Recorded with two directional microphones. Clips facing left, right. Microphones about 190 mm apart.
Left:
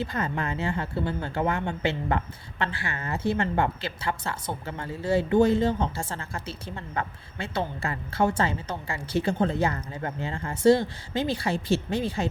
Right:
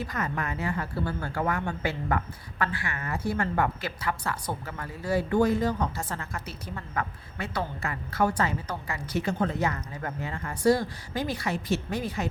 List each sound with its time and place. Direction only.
0.0 s speech: 30° left (ahead or behind)